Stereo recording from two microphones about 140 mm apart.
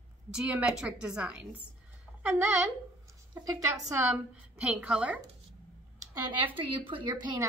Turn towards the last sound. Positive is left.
turn(degrees=-35)  # may be behind; listen again after turning